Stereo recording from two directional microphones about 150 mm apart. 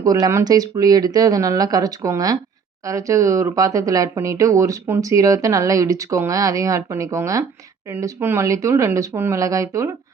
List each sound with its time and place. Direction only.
0.0 s speech: 25° right (ahead or behind)